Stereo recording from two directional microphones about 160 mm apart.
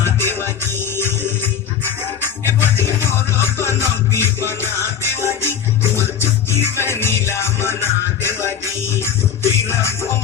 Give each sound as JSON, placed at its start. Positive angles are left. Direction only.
{"t": 0.0, "sound": "music", "side_deg": 15}